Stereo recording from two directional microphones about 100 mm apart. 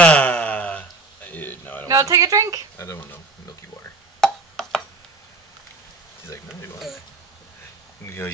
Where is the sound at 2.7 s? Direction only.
30° left (ahead or behind).